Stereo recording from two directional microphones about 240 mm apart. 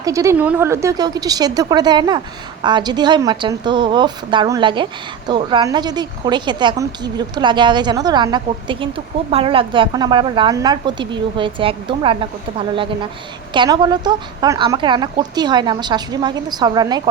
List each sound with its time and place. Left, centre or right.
0.0 s a woman's voice: centre